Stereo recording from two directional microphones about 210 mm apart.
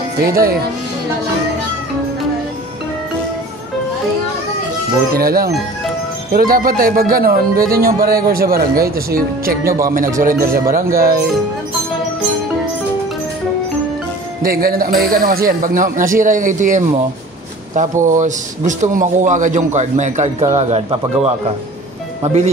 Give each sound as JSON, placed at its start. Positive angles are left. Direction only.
{"t": 0.2, "sound": "speech", "side_deg": -45}
{"t": 5.1, "sound": "a man's voice", "side_deg": -45}
{"t": 14.4, "sound": "a man's voice", "side_deg": -45}